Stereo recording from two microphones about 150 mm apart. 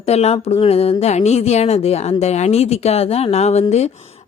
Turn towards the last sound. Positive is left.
turn(degrees=45)  # may be behind; listen again after turning